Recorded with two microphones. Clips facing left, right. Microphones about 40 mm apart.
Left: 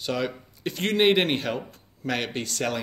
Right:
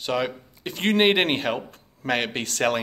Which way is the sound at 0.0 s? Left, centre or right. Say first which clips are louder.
Right 2 dB; right.